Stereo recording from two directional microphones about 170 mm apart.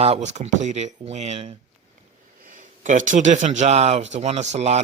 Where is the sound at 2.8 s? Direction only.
45° right (ahead or behind).